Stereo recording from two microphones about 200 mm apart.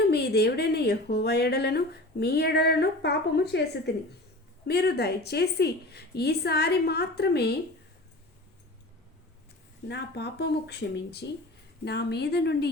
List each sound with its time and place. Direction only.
0.1 s a woman's voice: 55° left (ahead or behind)
9.9 s speech: 55° left (ahead or behind)